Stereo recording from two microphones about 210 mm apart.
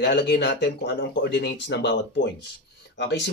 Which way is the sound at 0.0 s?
55° left (ahead or behind).